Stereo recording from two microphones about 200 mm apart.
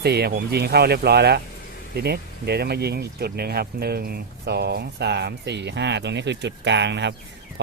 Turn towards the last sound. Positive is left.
turn(degrees=-60)  # may be behind; listen again after turning